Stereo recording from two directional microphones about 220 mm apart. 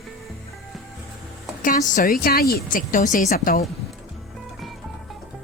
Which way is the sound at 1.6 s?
35° left (ahead or behind).